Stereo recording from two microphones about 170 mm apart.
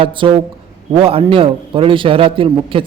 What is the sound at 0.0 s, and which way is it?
A man's voice, 30° right (ahead or behind).